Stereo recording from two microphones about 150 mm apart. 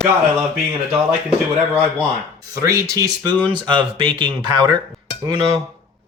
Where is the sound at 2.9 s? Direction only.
20° right (ahead or behind).